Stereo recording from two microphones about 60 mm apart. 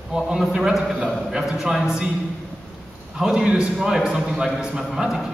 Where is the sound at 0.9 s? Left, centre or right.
Centre.